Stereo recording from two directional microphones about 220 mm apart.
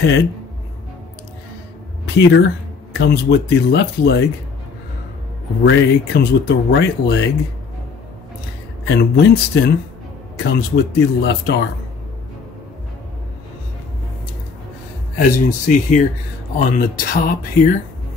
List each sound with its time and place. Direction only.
2.1 s speech: 50° left (ahead or behind)
5.6 s speech: 50° left (ahead or behind)
8.8 s speech: 50° left (ahead or behind)
15.1 s speech: 35° left (ahead or behind)